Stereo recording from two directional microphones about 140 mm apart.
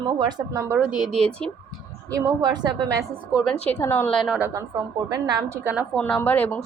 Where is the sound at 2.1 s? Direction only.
20° right (ahead or behind).